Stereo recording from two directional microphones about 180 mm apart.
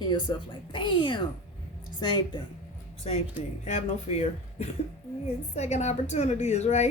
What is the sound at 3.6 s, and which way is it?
A woman's voice, 40° left (ahead or behind).